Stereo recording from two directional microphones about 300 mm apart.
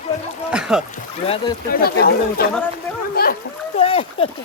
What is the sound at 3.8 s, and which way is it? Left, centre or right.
Speech, centre.